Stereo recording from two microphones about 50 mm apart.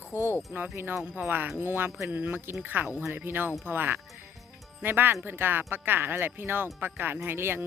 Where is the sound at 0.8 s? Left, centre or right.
Right.